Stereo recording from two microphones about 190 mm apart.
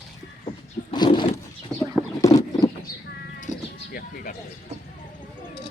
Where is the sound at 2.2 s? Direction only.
20° left (ahead or behind).